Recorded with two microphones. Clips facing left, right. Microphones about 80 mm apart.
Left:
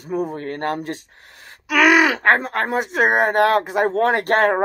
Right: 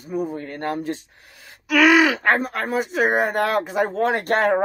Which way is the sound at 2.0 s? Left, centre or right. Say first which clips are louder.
Even; left.